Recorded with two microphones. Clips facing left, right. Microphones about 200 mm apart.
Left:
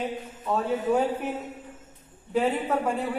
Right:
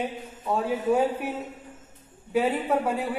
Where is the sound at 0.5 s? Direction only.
10° right (ahead or behind).